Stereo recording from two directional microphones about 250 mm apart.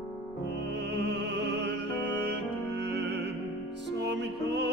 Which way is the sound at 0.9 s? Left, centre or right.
Right.